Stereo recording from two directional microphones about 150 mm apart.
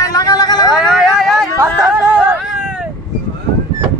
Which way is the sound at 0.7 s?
5° right (ahead or behind).